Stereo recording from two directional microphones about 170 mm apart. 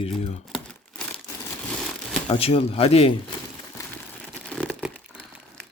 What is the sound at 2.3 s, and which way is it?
Speech, 35° left (ahead or behind).